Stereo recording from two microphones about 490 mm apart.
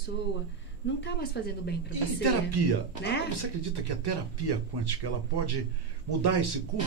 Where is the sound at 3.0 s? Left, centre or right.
Left.